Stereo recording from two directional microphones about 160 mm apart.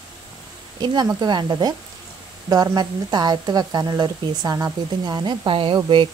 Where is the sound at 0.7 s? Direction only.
25° right (ahead or behind).